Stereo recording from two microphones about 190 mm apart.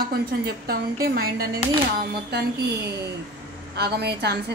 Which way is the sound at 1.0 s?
50° right (ahead or behind).